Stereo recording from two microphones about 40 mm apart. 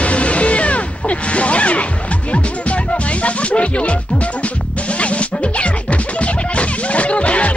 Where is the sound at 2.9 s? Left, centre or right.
Left.